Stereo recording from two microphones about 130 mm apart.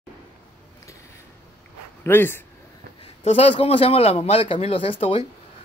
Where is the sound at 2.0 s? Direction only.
15° left (ahead or behind).